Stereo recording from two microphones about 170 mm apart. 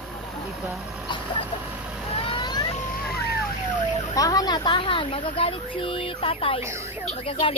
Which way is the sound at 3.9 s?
20° left (ahead or behind).